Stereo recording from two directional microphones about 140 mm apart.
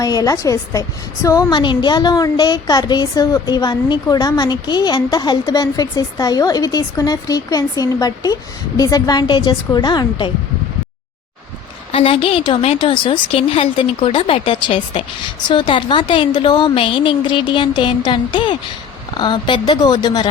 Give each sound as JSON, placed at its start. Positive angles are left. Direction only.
{"t": 0.0, "sound": "a woman's voice", "side_deg": 25}
{"t": 11.9, "sound": "a woman's voice", "side_deg": 40}